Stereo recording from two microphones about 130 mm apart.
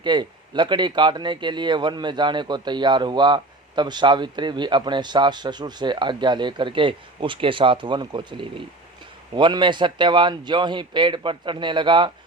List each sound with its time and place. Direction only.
0.0 s speech: 35° right (ahead or behind)